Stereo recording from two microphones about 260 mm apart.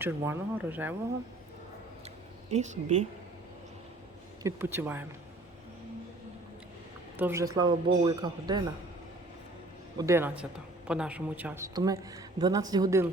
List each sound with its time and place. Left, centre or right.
0.0 s a woman's voice: centre
2.5 s a woman's voice: right
4.4 s a woman's voice: centre
7.2 s a woman's voice: centre
10.0 s a woman's voice: centre